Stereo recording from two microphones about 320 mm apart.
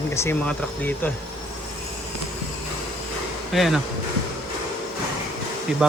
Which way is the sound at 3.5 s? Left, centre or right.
Centre.